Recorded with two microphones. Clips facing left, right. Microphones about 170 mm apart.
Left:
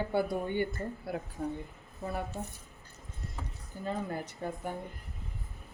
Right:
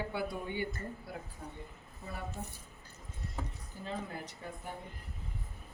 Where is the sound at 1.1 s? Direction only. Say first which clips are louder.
Left 8 dB; 65° left (ahead or behind).